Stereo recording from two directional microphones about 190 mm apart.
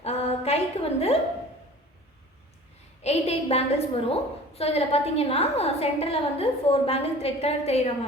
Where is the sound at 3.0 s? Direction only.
35° left (ahead or behind).